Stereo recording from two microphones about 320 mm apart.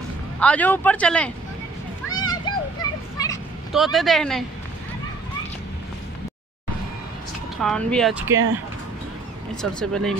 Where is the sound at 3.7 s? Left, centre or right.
Centre.